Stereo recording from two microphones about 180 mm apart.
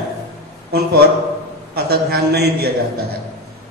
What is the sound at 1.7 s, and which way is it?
A man's voice, 60° right (ahead or behind).